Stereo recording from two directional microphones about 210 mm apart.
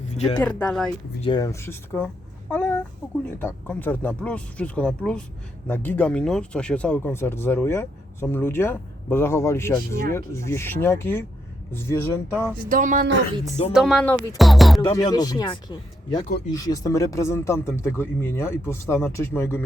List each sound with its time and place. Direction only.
0.3 s music: 5° left (ahead or behind)
1.2 s speech: 20° left (ahead or behind)
12.6 s speech: 40° right (ahead or behind)
13.7 s music: centre (ahead or behind)
14.8 s speech: 20° left (ahead or behind)